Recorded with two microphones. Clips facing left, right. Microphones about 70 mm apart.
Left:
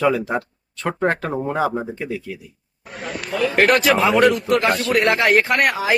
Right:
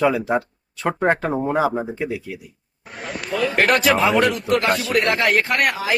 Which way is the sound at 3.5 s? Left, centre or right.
Centre.